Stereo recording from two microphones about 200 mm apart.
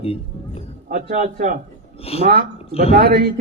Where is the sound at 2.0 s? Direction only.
30° left (ahead or behind).